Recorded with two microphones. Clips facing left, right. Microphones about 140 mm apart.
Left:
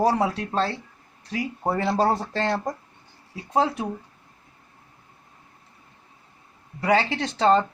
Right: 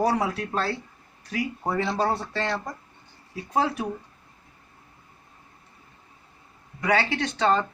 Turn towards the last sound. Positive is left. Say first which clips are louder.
# left 3 dB
turn(degrees=30)  # may be behind; listen again after turning